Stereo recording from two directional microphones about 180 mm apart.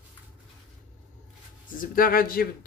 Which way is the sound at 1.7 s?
50° left (ahead or behind).